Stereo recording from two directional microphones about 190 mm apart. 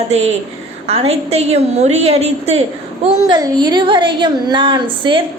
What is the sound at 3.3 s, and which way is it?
A woman's voice, 20° right (ahead or behind).